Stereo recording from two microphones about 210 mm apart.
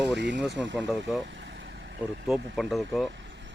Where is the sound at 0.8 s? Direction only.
Centre (ahead or behind).